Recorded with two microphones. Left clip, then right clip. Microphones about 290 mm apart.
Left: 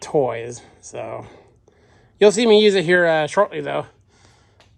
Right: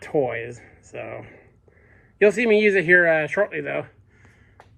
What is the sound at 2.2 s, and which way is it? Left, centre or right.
Speech, centre.